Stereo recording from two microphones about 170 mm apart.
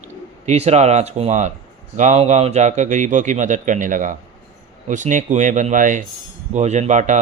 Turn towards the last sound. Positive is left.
turn(degrees=-45)  # may be behind; listen again after turning